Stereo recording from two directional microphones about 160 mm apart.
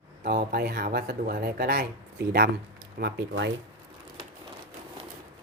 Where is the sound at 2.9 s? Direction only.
90° right.